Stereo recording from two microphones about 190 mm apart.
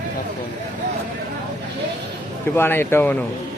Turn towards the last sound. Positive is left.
turn(degrees=10)  # may be behind; listen again after turning